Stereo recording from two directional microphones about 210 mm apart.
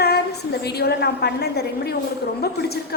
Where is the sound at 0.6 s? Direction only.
50° left (ahead or behind).